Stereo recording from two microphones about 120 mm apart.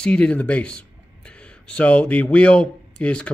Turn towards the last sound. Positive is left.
turn(degrees=10)  # may be behind; listen again after turning